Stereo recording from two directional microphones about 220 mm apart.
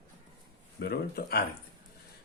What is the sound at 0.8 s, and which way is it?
Speech, 45° left (ahead or behind).